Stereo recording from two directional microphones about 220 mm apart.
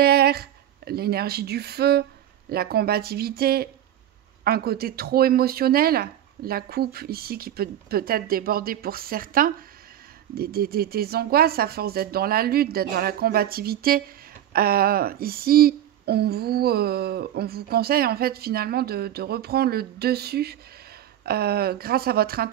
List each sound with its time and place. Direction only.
0.0 s a woman's voice: 45° right (ahead or behind)